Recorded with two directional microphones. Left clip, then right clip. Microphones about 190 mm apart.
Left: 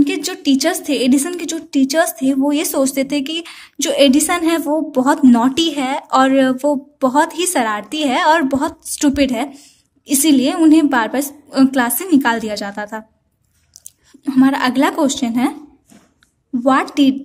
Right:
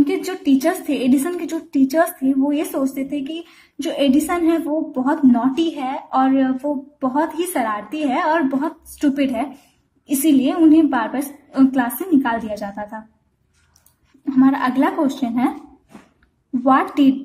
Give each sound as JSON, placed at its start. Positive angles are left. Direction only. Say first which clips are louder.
{"t": 0.0, "sound": "a woman's voice", "louder": "left 2 dB", "side_deg": 35}
{"t": 14.2, "sound": "a woman's voice", "louder": "left 2 dB", "side_deg": 40}
{"t": 16.6, "sound": "a woman's voice", "louder": "left 1 dB", "side_deg": 30}